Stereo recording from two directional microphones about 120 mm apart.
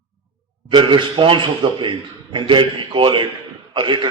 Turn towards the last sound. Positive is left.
turn(degrees=-40)  # may be behind; listen again after turning